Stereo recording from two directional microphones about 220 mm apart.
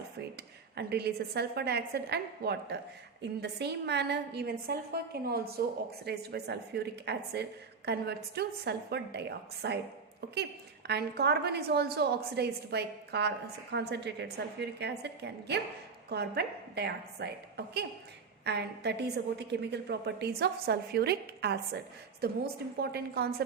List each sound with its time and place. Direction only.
0.8 s a woman's voice: 45° right (ahead or behind)
10.8 s a woman's voice: 45° right (ahead or behind)
18.4 s a woman's voice: 50° right (ahead or behind)
22.8 s a woman's voice: 45° right (ahead or behind)